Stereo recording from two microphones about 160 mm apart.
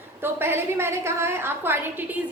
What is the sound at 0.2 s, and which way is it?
A woman's voice, 15° right (ahead or behind).